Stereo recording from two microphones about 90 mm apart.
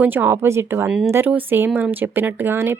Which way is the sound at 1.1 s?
20° right (ahead or behind).